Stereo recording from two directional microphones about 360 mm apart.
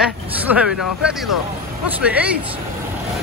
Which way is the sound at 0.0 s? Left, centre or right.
Centre.